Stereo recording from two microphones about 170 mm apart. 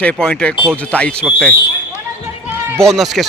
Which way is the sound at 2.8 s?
Centre (ahead or behind).